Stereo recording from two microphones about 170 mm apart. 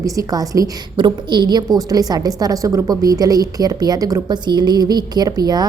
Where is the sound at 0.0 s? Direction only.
20° right (ahead or behind).